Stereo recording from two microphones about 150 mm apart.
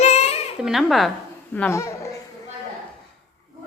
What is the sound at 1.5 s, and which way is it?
Speech, 15° left (ahead or behind).